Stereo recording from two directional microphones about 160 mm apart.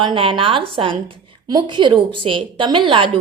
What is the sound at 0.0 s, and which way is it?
A woman's voice, 30° right (ahead or behind).